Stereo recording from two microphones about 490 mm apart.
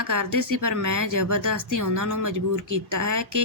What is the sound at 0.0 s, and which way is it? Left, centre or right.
Speech, right.